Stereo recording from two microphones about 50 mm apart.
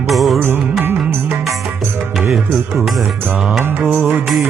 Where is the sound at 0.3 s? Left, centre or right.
Right.